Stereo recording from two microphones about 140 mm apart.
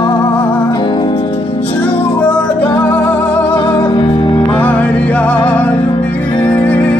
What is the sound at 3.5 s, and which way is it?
Music, 35° left (ahead or behind).